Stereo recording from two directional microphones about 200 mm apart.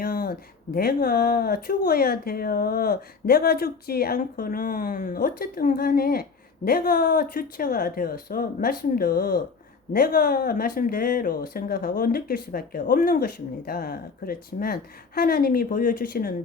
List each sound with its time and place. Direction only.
0.0 s speech: 45° left (ahead or behind)